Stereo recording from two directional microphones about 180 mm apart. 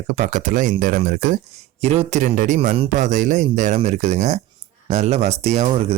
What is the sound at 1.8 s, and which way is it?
Speech, 35° right (ahead or behind).